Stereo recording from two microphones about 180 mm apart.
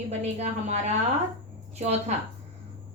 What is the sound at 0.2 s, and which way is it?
Speech, 40° right (ahead or behind).